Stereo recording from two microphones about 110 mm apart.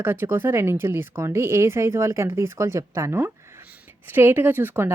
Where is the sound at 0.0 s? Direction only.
20° right (ahead or behind).